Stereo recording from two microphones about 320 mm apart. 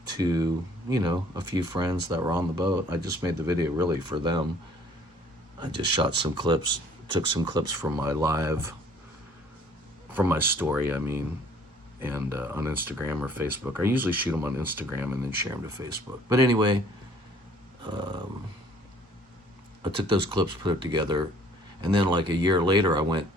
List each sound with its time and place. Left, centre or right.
0.2 s speech: centre
5.5 s speech: centre
10.1 s speech: centre
17.8 s speech: centre
19.8 s speech: centre